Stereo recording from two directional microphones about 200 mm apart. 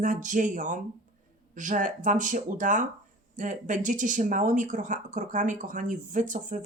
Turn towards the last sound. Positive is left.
turn(degrees=-40)  # may be behind; listen again after turning